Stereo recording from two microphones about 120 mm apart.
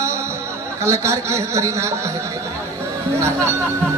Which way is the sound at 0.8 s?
25° right (ahead or behind).